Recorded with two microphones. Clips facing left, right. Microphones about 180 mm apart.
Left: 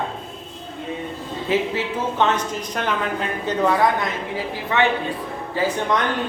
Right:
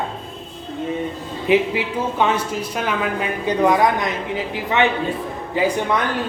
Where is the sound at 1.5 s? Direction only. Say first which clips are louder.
Right 4 dB; 10° right (ahead or behind).